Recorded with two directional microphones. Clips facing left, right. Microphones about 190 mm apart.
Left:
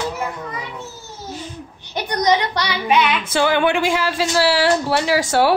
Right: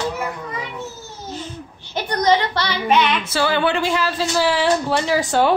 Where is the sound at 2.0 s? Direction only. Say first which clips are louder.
Even; 20° left (ahead or behind).